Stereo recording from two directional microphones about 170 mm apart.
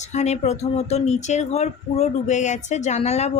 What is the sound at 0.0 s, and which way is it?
Speech, 40° left (ahead or behind).